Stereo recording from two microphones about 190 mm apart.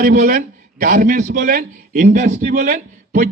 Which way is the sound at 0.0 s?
45° right (ahead or behind).